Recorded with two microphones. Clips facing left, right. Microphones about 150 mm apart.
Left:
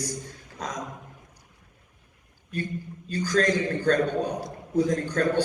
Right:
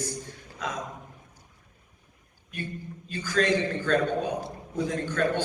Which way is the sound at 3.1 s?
40° left (ahead or behind).